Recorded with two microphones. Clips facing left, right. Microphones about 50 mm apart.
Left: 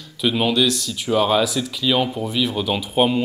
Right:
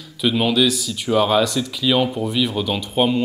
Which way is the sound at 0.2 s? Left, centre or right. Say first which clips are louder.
Right 1 dB; centre.